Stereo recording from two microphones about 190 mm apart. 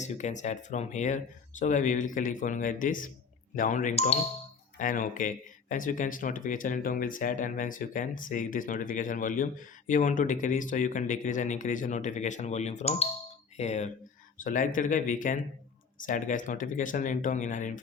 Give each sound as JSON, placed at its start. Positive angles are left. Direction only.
{"t": 0.0, "sound": "speech", "side_deg": 40}